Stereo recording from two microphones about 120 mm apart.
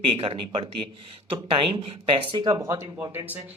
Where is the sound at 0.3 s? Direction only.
45° right (ahead or behind).